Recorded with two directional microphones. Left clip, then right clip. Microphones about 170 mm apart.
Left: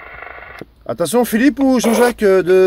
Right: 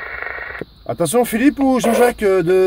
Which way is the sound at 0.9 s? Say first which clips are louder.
Left 1 dB; 5° left (ahead or behind).